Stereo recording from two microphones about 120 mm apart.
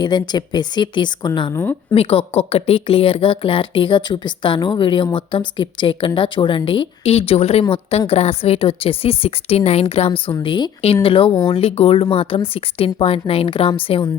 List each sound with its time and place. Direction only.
0.0 s speech: 40° left (ahead or behind)
2.0 s speech: 55° left (ahead or behind)